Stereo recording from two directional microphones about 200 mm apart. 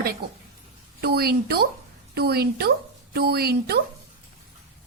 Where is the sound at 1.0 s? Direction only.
50° right (ahead or behind).